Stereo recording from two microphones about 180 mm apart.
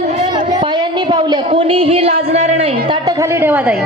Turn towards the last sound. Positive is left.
turn(degrees=-10)  # may be behind; listen again after turning